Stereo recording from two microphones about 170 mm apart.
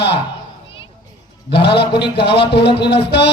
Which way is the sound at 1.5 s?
75° left (ahead or behind).